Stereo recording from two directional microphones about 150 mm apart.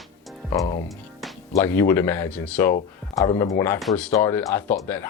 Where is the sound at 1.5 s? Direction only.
15° left (ahead or behind).